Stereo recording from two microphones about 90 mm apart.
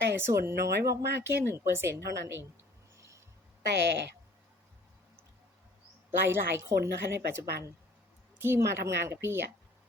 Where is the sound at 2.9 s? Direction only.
35° right (ahead or behind).